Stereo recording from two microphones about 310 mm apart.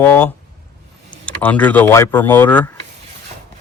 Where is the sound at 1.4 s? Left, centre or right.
Centre.